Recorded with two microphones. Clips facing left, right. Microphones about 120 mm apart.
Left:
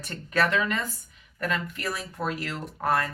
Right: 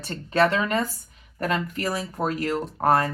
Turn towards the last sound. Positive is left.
turn(degrees=-40)  # may be behind; listen again after turning